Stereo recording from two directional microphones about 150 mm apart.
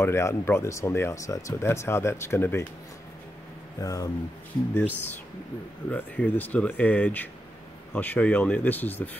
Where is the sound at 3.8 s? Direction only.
25° left (ahead or behind).